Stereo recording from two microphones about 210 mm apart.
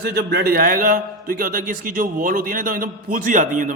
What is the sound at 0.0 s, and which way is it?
A man's voice, 50° right (ahead or behind).